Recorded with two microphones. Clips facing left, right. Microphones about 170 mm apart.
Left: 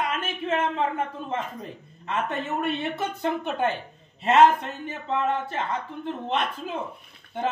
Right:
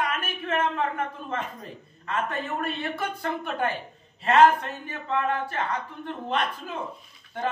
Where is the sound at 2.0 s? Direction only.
25° left (ahead or behind).